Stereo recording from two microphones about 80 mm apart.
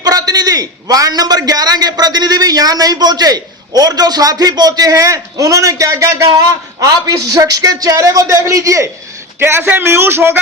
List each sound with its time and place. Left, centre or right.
0.0 s a man's voice: right
9.4 s speech: right